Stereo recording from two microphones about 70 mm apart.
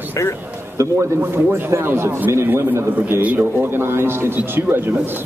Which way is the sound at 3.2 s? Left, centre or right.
Right.